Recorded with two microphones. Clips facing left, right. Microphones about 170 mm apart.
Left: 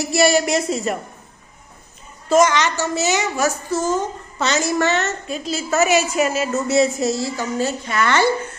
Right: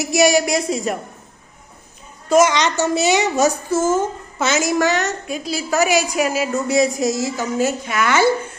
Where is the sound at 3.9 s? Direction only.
5° right (ahead or behind).